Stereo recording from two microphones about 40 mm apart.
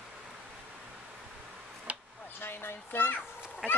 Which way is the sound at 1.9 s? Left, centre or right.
Right.